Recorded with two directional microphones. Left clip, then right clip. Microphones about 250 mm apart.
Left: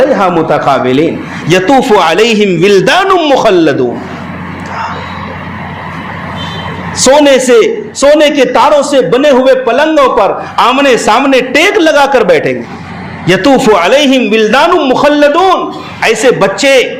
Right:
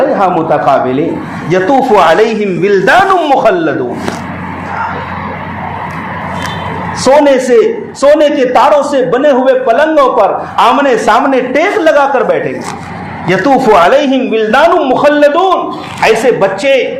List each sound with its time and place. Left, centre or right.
0.1 s a man's voice: left
7.3 s a man's voice: left